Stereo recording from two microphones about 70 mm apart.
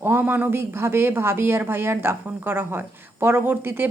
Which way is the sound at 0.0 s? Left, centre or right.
Right.